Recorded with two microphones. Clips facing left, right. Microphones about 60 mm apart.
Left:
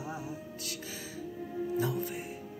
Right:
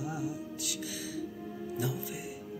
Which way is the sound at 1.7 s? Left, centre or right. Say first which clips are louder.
Left 3 dB; left.